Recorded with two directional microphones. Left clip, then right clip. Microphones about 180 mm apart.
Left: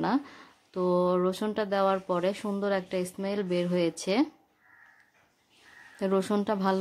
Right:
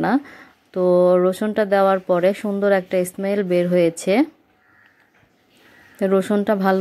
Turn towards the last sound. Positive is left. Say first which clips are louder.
# right 9 dB
turn(degrees=-15)  # may be behind; listen again after turning